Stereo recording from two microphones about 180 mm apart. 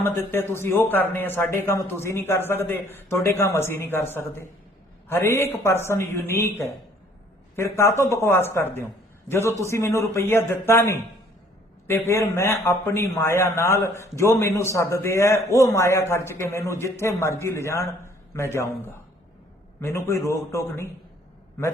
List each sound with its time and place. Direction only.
0.0 s a man's voice: 10° left (ahead or behind)